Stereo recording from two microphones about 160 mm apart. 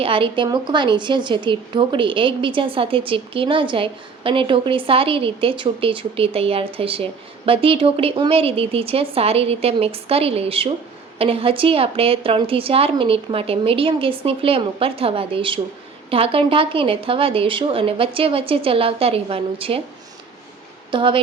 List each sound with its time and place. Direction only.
0.0 s a woman's voice: 35° right (ahead or behind)
20.9 s a woman's voice: 30° right (ahead or behind)